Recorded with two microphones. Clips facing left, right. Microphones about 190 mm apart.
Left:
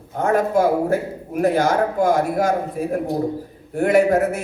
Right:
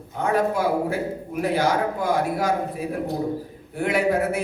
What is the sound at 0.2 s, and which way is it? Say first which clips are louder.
A man's voice: left 4 dB; 45° left (ahead or behind).